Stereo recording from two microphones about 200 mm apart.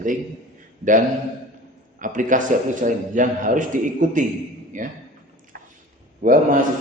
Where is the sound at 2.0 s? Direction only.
40° right (ahead or behind).